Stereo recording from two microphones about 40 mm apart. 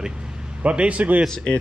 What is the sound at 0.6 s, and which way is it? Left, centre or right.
Speech, right.